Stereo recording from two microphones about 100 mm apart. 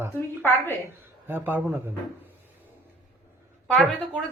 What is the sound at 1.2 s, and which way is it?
Speech, 20° right (ahead or behind).